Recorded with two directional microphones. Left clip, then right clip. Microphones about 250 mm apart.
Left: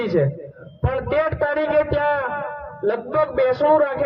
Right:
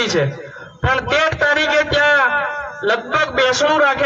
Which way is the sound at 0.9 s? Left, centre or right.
Right.